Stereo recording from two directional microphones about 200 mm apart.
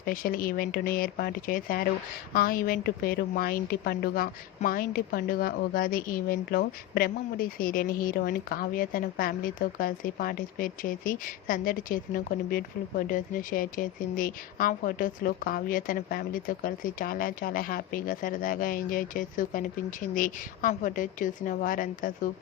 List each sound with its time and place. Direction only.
0.0 s a woman's voice: 45° left (ahead or behind)